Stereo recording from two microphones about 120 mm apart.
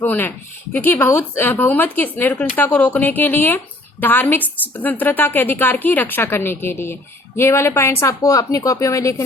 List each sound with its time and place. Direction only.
0.0 s speech: 15° left (ahead or behind)